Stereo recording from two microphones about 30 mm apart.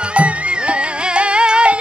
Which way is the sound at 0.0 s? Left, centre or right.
Right.